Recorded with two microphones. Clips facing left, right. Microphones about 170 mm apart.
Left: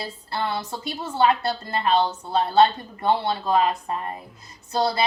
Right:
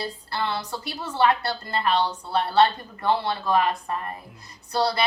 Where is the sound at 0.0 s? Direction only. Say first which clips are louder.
Even; 20° left (ahead or behind).